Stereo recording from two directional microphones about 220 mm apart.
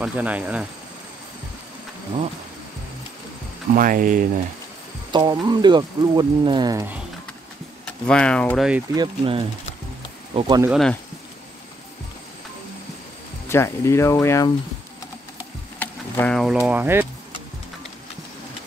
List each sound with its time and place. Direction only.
0.0 s speech: 5° right (ahead or behind)
3.7 s speech: 40° right (ahead or behind)
5.1 s speech: 20° right (ahead or behind)
7.8 s speech: 5° left (ahead or behind)
8.9 s speech: 20° right (ahead or behind)
10.7 s speech: centre (ahead or behind)
13.5 s speech: 10° left (ahead or behind)
15.8 s a sound: 5° left (ahead or behind)
16.5 s speech: 10° right (ahead or behind)